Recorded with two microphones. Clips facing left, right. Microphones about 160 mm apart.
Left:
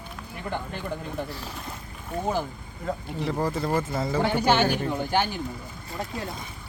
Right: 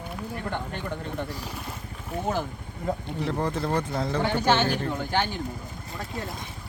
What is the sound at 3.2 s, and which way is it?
Speech, 5° left (ahead or behind).